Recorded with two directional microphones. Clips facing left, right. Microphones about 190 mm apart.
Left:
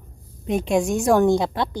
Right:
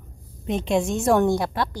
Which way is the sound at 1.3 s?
20° left (ahead or behind).